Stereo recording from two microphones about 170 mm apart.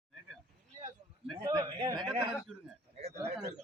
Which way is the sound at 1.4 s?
25° right (ahead or behind).